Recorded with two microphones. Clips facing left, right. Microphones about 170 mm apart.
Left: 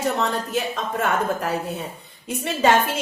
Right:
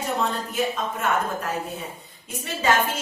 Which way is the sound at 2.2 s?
70° left (ahead or behind).